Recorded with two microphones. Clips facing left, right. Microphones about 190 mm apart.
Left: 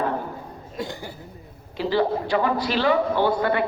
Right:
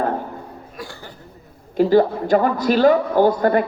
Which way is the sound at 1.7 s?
45° right (ahead or behind).